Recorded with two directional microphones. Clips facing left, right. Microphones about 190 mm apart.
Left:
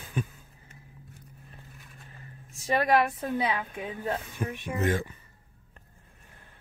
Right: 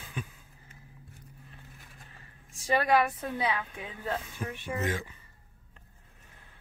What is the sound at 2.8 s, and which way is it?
Speech, 20° left (ahead or behind).